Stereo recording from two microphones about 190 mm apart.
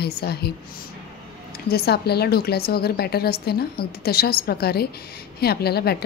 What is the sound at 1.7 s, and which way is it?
A woman's voice, 55° left (ahead or behind).